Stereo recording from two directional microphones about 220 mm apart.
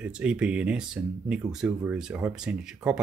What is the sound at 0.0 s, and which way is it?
Speech, 5° right (ahead or behind).